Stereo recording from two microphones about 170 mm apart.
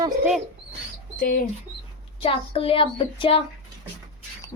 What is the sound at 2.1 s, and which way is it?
A child's voice, 30° left (ahead or behind).